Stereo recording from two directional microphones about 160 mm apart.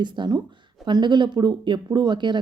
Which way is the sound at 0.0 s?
30° right (ahead or behind).